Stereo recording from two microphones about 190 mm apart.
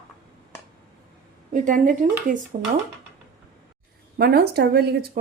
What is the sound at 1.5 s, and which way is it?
Speech, 45° right (ahead or behind).